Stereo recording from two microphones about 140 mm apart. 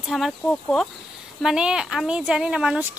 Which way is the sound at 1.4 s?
5° right (ahead or behind).